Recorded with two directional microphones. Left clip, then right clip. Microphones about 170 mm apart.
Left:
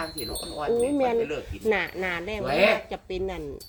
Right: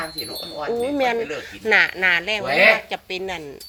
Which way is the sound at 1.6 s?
Centre (ahead or behind).